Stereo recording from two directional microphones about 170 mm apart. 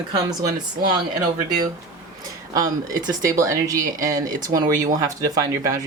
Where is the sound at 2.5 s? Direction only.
20° right (ahead or behind).